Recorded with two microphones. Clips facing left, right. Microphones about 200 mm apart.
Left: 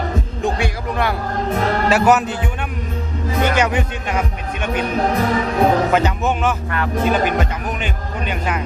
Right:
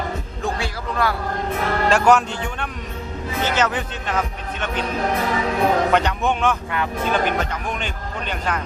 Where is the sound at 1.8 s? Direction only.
5° left (ahead or behind).